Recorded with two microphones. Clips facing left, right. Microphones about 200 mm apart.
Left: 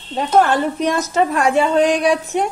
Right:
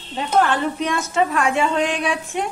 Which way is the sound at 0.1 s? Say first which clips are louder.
Left 4 dB; 45° left (ahead or behind).